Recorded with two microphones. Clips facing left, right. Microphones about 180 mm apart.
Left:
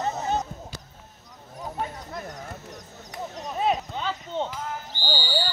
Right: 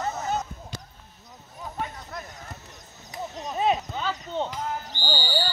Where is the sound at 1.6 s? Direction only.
35° left (ahead or behind).